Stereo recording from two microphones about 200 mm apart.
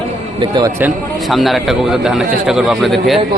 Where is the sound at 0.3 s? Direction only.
20° right (ahead or behind).